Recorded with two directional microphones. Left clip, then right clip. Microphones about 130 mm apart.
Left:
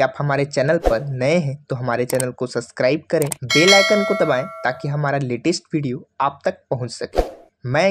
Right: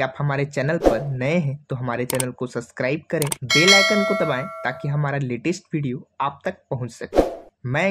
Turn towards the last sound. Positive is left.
turn(degrees=-5)  # may be behind; listen again after turning